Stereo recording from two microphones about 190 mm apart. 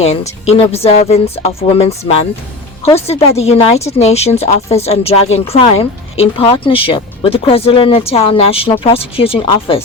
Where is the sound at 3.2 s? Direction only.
35° left (ahead or behind).